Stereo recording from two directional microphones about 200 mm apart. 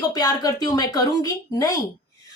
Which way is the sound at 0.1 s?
20° left (ahead or behind).